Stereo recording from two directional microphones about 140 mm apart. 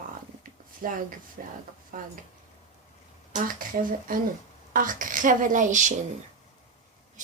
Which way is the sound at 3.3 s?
75° right (ahead or behind).